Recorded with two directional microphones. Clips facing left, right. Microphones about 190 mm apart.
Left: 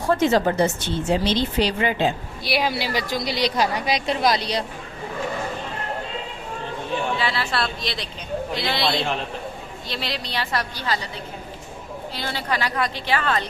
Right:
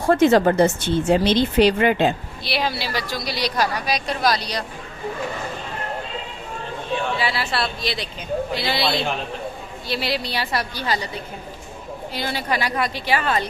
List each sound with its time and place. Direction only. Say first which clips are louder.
0.2 s speech: right 6 dB; 55° right (ahead or behind)
2.4 s a woman's voice: left 2 dB; 10° left (ahead or behind)
7.2 s a woman's voice: right 1 dB; 10° right (ahead or behind)
12.1 s a woman's voice: right 2 dB; 15° right (ahead or behind)